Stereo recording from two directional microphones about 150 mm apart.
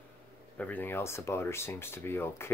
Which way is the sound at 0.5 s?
10° left (ahead or behind).